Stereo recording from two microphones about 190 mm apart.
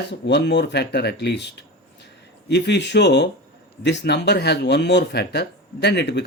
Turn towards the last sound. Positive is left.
turn(degrees=60)  # may be behind; listen again after turning